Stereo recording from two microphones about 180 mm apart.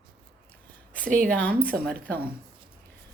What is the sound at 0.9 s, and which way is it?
Speech, 50° right (ahead or behind).